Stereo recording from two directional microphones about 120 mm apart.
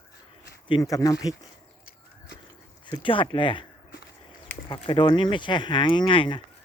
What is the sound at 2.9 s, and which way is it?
Speech, 45° left (ahead or behind).